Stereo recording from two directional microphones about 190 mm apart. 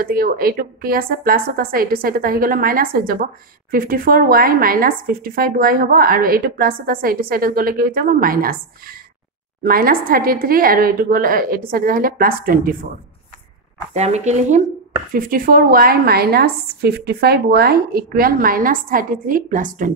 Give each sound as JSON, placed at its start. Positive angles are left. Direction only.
{"t": 0.0, "sound": "speech", "side_deg": -50}
{"t": 13.9, "sound": "speech", "side_deg": -35}
{"t": 15.1, "sound": "speech", "side_deg": -50}